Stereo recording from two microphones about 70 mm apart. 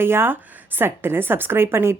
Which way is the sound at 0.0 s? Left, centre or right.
Right.